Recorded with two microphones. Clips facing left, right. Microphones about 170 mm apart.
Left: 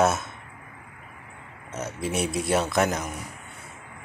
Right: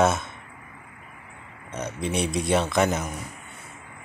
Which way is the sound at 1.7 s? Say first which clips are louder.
Right 1 dB; 5° left (ahead or behind).